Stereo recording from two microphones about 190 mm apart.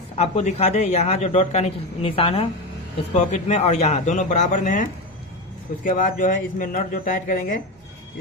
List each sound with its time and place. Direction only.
0.2 s speech: 35° left (ahead or behind)